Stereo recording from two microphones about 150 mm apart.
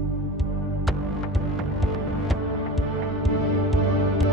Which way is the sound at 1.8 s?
Centre (ahead or behind).